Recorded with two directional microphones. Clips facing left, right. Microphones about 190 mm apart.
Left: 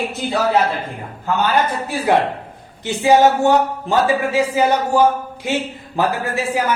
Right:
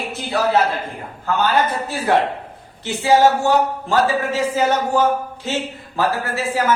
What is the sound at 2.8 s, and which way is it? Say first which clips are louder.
A man's voice: left 2 dB; 20° left (ahead or behind).